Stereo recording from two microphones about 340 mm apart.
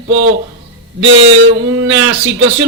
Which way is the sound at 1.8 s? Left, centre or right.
Right.